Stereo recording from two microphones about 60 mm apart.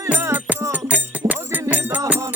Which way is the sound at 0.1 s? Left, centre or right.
Right.